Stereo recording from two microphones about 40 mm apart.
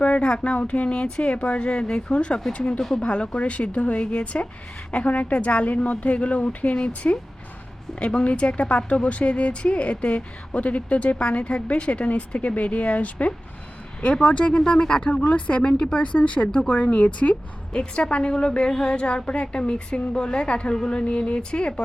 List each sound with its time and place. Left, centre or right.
0.0 s a woman's voice: left
17.7 s a woman's voice: left